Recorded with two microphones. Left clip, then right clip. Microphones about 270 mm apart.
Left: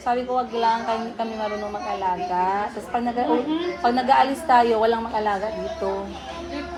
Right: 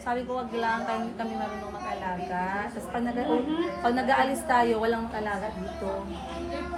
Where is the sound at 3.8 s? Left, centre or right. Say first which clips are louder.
Left 7 dB; centre.